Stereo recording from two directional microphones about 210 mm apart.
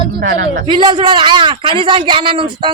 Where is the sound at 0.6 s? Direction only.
20° right (ahead or behind).